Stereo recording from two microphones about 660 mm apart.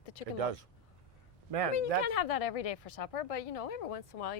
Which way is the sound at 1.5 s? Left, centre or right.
Right.